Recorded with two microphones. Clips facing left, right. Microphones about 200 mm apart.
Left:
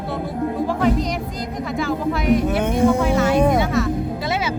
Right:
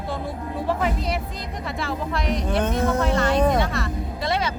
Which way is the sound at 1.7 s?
Centre (ahead or behind).